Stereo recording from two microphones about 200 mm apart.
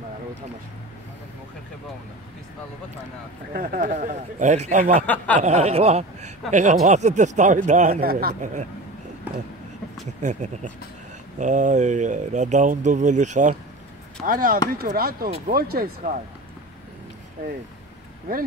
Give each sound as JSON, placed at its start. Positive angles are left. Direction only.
{"t": 3.5, "sound": "speech", "side_deg": -45}
{"t": 5.0, "sound": "a sound", "side_deg": 10}
{"t": 5.4, "sound": "speech", "side_deg": -35}
{"t": 10.2, "sound": "speech", "side_deg": -35}